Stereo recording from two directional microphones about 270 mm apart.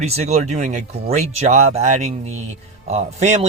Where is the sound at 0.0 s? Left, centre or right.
Right.